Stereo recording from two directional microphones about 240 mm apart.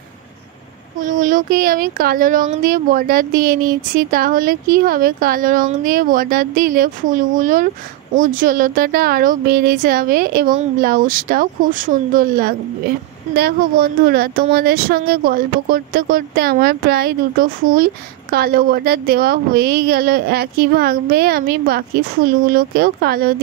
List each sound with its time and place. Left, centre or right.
0.9 s speech: right